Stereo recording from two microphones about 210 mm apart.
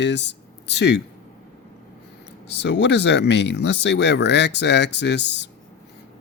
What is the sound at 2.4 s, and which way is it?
Speech, 55° left (ahead or behind).